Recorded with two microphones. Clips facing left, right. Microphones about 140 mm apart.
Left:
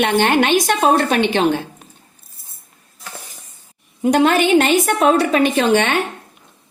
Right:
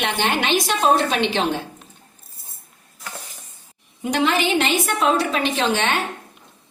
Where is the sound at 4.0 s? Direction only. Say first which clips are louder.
Left 6 dB; 50° left (ahead or behind).